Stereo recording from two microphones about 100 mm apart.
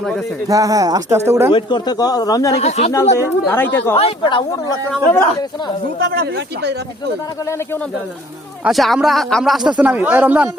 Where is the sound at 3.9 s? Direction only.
75° left (ahead or behind).